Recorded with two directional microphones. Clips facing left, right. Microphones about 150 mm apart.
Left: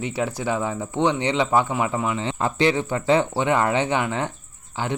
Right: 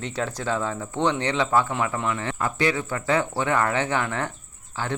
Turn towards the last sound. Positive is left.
turn(degrees=15)  # may be behind; listen again after turning